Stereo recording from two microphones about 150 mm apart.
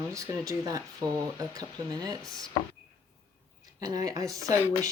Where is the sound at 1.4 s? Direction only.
25° right (ahead or behind).